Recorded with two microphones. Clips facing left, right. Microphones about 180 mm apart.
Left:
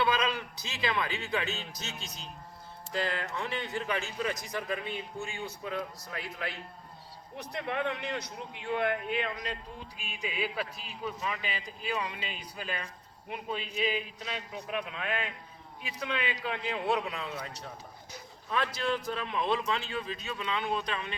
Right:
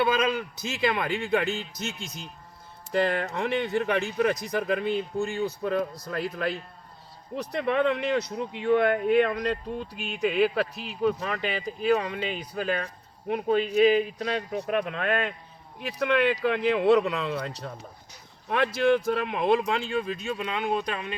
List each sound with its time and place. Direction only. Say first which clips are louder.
0.0 s a man's voice: right 5 dB; 50° right (ahead or behind); by 17.7 s 80° right
18.4 s a man's voice: right 9 dB; 65° right (ahead or behind); by 21.2 s 45° right (ahead or behind)